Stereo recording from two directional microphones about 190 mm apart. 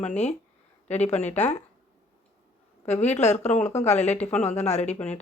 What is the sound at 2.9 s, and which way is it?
Speech, 35° left (ahead or behind).